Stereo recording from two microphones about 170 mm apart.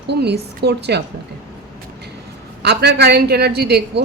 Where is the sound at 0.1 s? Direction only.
80° right.